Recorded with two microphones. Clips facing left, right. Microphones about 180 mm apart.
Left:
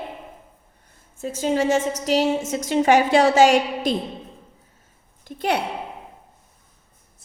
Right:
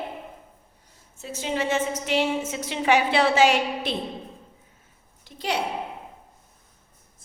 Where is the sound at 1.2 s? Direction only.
45° left (ahead or behind).